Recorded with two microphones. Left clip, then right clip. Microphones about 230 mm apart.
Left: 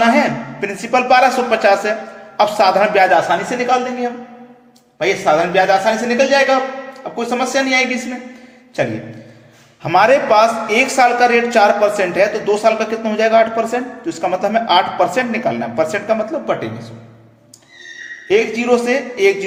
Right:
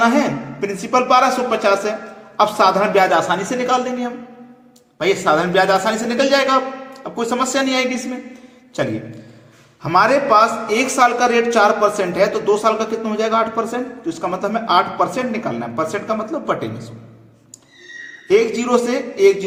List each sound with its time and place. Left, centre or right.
0.0 s a man's voice: centre
5.0 s a man's voice: right
9.8 s a man's voice: centre
18.3 s a man's voice: centre